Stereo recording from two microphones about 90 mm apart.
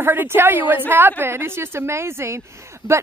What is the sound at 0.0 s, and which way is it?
A woman's voice, 20° right (ahead or behind).